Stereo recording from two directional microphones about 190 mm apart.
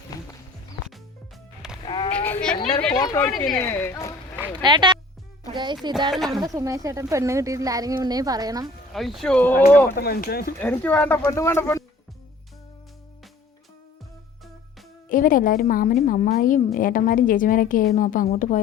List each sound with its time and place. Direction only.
1.8 s a sound: 25° left (ahead or behind)
2.1 s sheep: 10° left (ahead or behind)
2.6 s a woman's voice: 25° left (ahead or behind)
3.2 s speech: centre (ahead or behind)
3.6 s speech: 15° left (ahead or behind)
4.6 s speech: 25° right (ahead or behind)
6.1 s speech: centre (ahead or behind)
6.4 s a woman's voice: 20° right (ahead or behind)
8.9 s speech: centre (ahead or behind)
9.9 s a woman's voice: 50° left (ahead or behind)
10.6 s speech: 10° left (ahead or behind)
15.1 s a woman's voice: 45° left (ahead or behind)